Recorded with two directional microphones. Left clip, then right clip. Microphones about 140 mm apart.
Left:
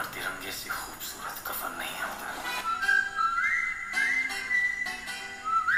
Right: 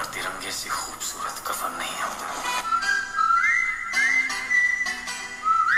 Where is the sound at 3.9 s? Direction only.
25° right (ahead or behind).